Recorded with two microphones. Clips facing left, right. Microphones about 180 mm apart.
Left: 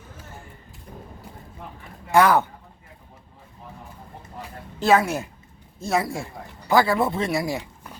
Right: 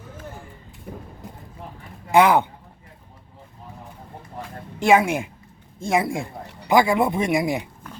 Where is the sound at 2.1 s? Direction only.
15° right (ahead or behind).